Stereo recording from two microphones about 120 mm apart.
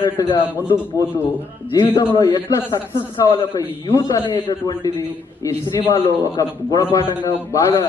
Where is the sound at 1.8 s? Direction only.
45° left (ahead or behind).